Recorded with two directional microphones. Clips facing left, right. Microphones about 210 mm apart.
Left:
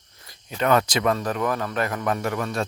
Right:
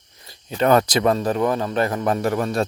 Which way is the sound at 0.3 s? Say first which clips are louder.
Right 4 dB; 30° right (ahead or behind).